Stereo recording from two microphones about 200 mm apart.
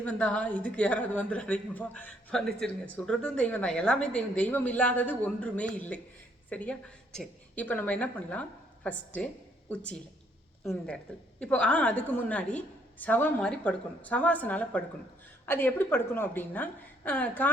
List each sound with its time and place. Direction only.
0.0 s a woman's voice: 5° left (ahead or behind)